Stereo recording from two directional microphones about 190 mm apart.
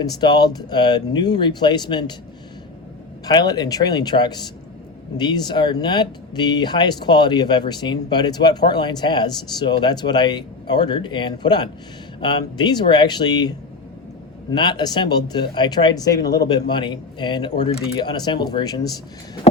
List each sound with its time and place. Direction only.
0.0 s speech: 20° left (ahead or behind)
3.2 s speech: 20° left (ahead or behind)
14.5 s speech: 20° left (ahead or behind)